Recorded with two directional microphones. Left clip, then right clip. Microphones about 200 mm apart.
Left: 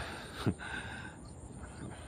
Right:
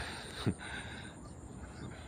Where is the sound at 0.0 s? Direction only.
5° left (ahead or behind).